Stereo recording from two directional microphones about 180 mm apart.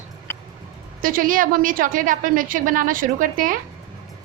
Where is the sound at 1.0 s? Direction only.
50° right (ahead or behind).